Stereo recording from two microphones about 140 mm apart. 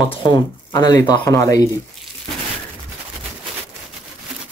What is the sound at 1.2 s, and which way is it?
Speech, 20° left (ahead or behind).